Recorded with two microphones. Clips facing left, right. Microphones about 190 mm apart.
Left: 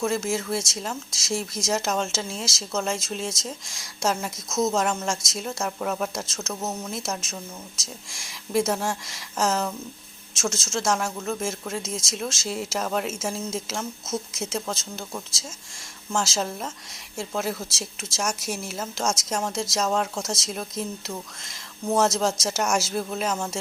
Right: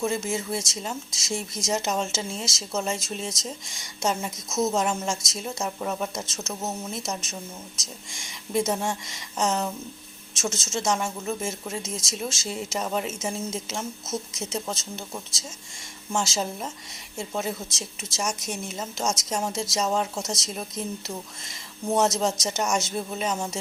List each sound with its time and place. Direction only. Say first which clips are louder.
0.0 s speech: left 2 dB; centre (ahead or behind)
4.4 s speech: left 1 dB; 25° right (ahead or behind)
4.7 s speech: left 1 dB; 5° right (ahead or behind)